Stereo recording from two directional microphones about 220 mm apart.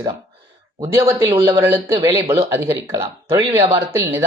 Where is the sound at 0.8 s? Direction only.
15° right (ahead or behind).